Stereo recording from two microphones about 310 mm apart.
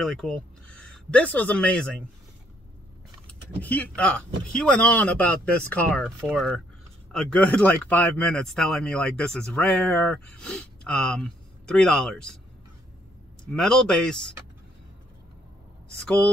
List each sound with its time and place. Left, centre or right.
0.0 s speech: centre
3.3 s speech: centre
13.6 s speech: centre